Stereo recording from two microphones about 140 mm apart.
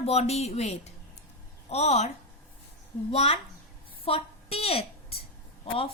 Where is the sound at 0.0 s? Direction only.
50° left (ahead or behind).